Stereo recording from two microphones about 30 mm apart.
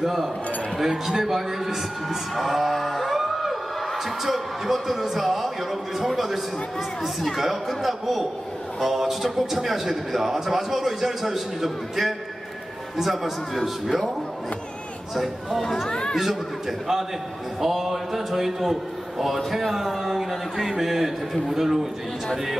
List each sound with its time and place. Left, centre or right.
0.0 s a man's voice: centre
2.7 s music: centre
4.2 s a man's voice: centre
13.6 s a man's voice: centre
15.6 s speech: centre
15.9 s chatter: left
17.6 s a man's voice: centre